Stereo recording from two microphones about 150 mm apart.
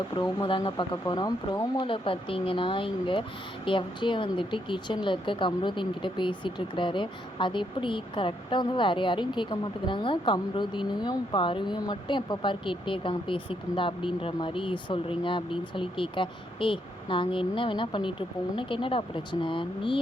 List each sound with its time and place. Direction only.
0.1 s speech: 30° left (ahead or behind)